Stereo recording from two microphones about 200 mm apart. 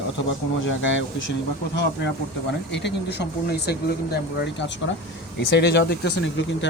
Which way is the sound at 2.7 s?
60° left (ahead or behind).